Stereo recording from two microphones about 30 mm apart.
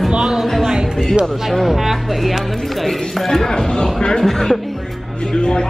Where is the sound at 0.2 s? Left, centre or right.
Centre.